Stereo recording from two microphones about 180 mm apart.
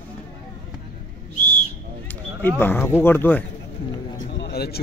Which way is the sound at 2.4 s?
10° left (ahead or behind).